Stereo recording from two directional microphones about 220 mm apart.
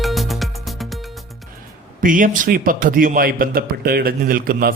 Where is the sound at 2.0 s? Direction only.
35° right (ahead or behind).